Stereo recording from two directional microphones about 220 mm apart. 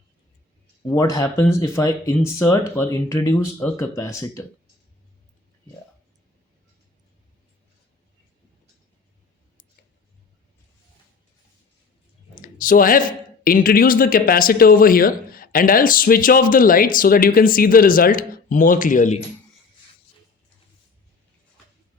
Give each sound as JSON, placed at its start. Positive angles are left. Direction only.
{"t": 0.9, "sound": "speech", "side_deg": 15}
{"t": 12.3, "sound": "speech", "side_deg": 40}